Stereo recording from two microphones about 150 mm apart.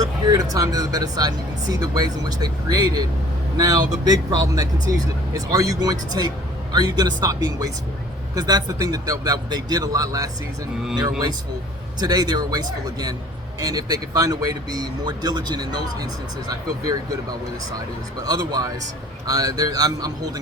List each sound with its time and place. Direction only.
0.0 s speech: 25° right (ahead or behind)
11.9 s speech: 25° right (ahead or behind)
18.2 s speech: 25° right (ahead or behind)